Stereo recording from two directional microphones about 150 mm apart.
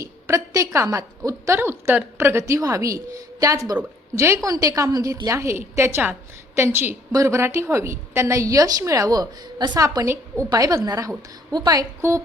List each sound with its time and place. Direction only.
0.0 s a woman's voice: 20° right (ahead or behind)